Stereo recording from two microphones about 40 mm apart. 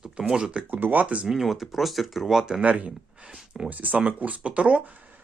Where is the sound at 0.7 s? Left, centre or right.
Right.